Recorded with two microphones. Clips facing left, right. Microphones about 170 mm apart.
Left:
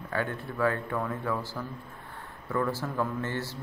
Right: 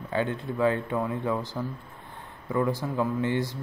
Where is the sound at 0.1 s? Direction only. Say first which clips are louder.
Right 4 dB; 20° right (ahead or behind).